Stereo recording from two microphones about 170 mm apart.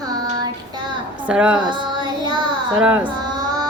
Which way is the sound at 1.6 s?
25° right (ahead or behind).